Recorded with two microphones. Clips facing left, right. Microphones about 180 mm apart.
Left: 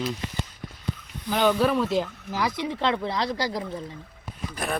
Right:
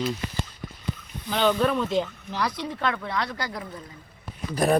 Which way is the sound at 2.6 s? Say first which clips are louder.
Left 3 dB; 25° left (ahead or behind).